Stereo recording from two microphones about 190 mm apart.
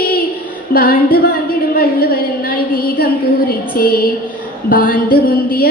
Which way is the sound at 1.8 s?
50° left (ahead or behind).